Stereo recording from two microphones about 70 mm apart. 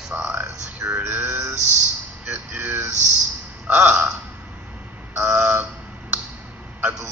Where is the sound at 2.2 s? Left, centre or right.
Right.